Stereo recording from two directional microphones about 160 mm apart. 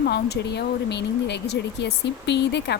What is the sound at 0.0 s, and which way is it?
A woman's voice, 90° left.